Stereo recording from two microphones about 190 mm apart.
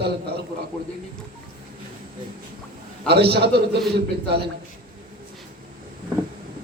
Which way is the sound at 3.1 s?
60° right (ahead or behind).